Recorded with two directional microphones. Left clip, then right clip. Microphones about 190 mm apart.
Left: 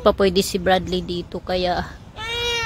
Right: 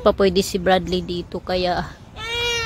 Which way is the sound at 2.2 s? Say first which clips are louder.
Right 1 dB; 35° right (ahead or behind).